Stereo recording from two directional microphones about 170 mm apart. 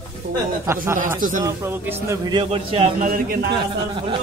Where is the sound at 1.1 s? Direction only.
55° right (ahead or behind).